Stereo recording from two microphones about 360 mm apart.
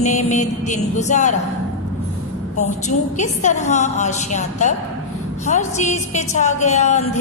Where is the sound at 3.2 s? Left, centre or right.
Centre.